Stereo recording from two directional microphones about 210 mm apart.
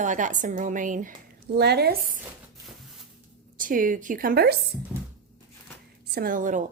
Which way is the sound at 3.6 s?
40° right (ahead or behind).